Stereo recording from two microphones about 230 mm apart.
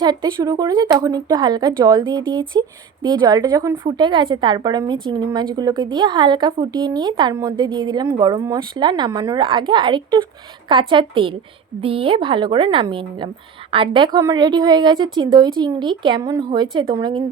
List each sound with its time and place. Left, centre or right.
0.0 s a woman's voice: centre